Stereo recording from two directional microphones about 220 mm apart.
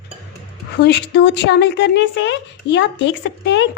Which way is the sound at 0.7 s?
50° left (ahead or behind).